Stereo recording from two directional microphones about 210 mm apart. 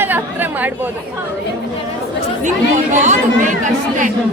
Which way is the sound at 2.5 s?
35° right (ahead or behind).